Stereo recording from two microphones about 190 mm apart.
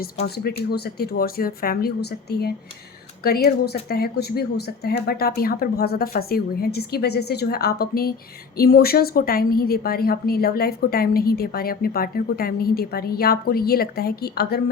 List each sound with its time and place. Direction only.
0.7 s a woman's voice: 55° left (ahead or behind)